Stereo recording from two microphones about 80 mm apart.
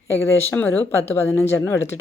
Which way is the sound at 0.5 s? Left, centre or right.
Left.